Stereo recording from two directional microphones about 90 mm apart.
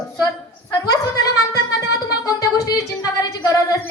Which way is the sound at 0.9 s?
40° left (ahead or behind).